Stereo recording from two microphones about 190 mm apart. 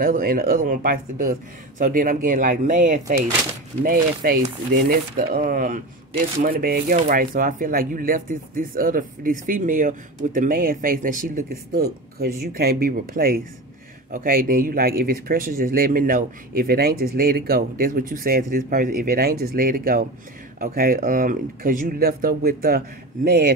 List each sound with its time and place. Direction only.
0.0 s speech: 50° right (ahead or behind)